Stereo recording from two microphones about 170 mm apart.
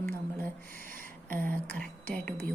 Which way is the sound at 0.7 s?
55° right (ahead or behind).